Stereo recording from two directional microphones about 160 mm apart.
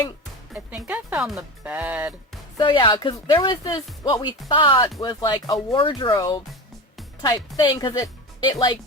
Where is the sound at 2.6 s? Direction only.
30° left (ahead or behind).